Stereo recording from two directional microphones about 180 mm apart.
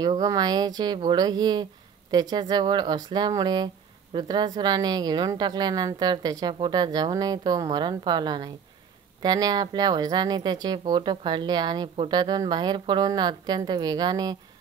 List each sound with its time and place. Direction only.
0.0 s speech: 20° right (ahead or behind)